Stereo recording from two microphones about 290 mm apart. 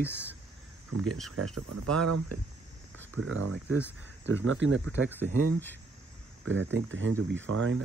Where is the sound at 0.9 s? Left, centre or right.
Right.